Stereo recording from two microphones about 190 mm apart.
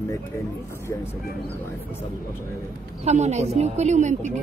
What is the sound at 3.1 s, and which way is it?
A woman's voice, 35° right (ahead or behind).